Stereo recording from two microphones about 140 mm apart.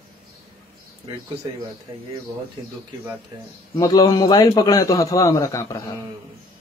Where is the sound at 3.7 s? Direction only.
25° left (ahead or behind).